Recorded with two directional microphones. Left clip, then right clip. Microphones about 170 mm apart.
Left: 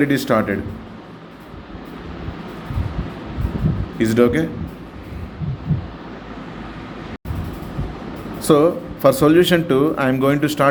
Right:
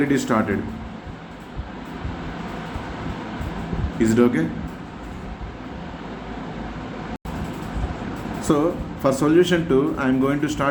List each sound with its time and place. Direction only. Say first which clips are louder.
0.0 s speech: left 3 dB; 30° left (ahead or behind)
3.9 s speech: left 3 dB; 30° left (ahead or behind)
8.4 s speech: left 7 dB; 40° left (ahead or behind)